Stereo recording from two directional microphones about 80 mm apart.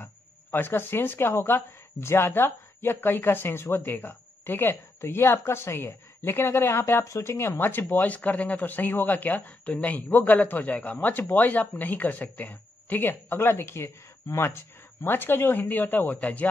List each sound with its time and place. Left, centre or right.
0.0 s speech: left